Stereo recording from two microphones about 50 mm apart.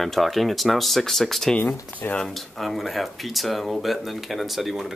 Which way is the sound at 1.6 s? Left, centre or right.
Left.